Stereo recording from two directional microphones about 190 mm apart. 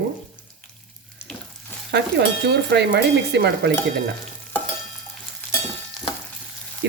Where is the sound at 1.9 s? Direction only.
65° right (ahead or behind).